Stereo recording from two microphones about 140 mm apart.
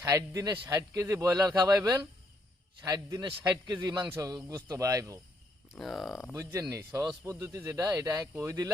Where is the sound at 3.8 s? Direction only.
15° right (ahead or behind).